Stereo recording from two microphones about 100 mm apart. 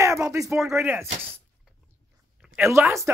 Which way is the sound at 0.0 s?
30° right (ahead or behind).